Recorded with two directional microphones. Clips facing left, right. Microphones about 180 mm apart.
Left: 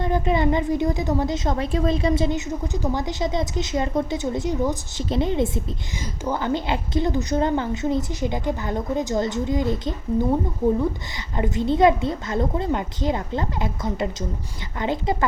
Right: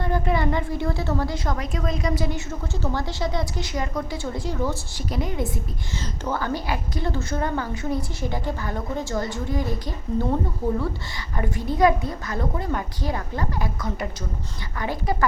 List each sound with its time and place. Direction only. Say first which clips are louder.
0.0 s a woman's voice: left 3 dB; 20° left (ahead or behind)
11.3 s a woman's voice: left 3 dB; 20° left (ahead or behind)